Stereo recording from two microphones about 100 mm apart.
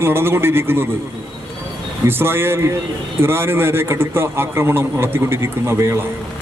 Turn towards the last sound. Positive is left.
turn(degrees=-25)  # may be behind; listen again after turning